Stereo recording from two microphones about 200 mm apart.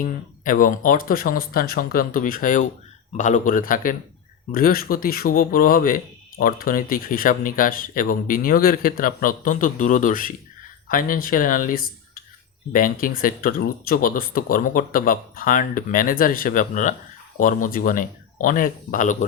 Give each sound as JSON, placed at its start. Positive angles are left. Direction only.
{"t": 0.0, "sound": "speech", "side_deg": 40}